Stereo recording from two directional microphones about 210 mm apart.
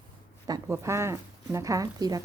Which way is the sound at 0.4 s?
15° right (ahead or behind).